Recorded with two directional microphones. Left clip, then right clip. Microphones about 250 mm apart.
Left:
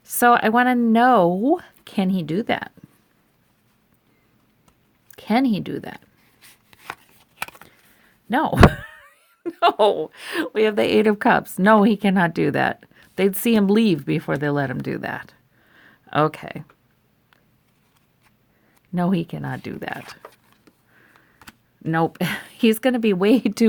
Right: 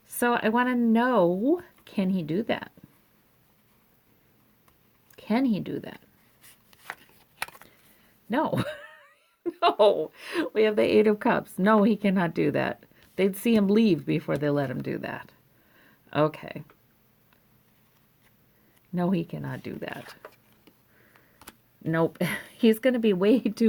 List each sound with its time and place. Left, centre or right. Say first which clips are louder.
0.0 s speech: left 9 dB; left
5.1 s speech: left 6 dB; left
6.4 s chopping: left 10 dB; centre
8.3 s speech: left 11 dB; left
18.9 s speech: left 5 dB; left
21.8 s speech: left 4 dB; left